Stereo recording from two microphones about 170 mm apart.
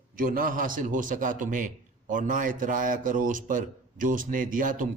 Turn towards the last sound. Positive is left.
turn(degrees=-50)  # may be behind; listen again after turning